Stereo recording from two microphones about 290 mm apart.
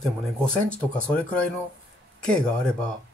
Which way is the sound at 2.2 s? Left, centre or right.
Centre.